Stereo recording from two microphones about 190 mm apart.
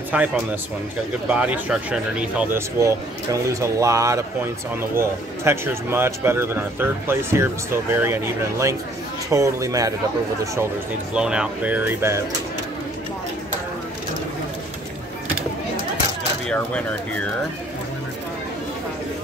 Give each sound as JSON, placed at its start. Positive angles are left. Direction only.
{"t": 0.1, "sound": "a man's voice", "side_deg": -10}
{"t": 11.1, "sound": "a man's voice", "side_deg": -5}
{"t": 16.4, "sound": "speech", "side_deg": 5}